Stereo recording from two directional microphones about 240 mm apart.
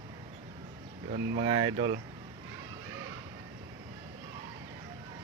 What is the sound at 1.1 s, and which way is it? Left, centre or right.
Speech, right.